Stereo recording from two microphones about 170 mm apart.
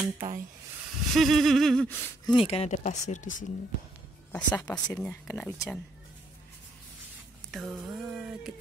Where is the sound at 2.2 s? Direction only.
30° left (ahead or behind).